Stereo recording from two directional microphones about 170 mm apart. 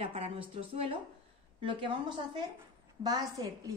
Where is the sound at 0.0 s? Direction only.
35° right (ahead or behind).